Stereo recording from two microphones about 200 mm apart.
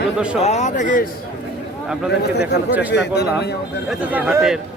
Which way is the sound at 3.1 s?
55° left (ahead or behind).